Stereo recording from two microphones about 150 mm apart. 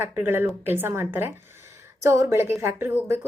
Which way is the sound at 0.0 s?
15° right (ahead or behind).